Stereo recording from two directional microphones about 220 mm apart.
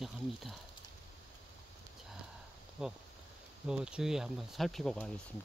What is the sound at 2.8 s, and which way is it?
Speech, 5° right (ahead or behind).